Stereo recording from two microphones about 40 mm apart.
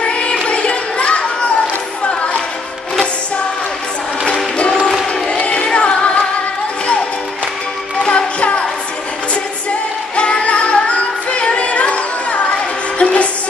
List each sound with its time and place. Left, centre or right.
0.0 s a sound: left
0.9 s children playing: left
2.0 s music: left
5.3 s singing: left
8.0 s music: left
10.1 s music: left